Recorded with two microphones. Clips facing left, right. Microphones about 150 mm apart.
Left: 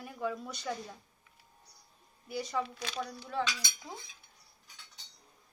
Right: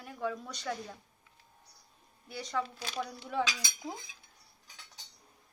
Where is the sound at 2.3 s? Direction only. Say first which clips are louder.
Left 1 dB; 5° left (ahead or behind).